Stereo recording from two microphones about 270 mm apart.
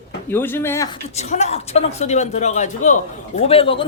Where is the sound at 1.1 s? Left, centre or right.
Left.